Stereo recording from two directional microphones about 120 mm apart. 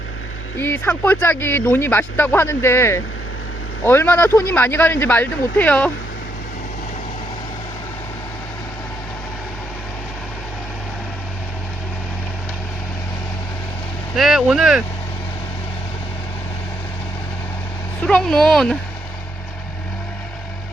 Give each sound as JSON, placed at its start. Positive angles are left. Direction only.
{"t": 0.6, "sound": "speech", "side_deg": 20}
{"t": 14.2, "sound": "speech", "side_deg": 0}
{"t": 18.0, "sound": "speech", "side_deg": 5}